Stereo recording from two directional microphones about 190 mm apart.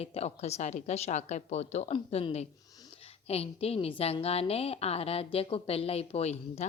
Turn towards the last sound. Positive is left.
turn(degrees=35)  # may be behind; listen again after turning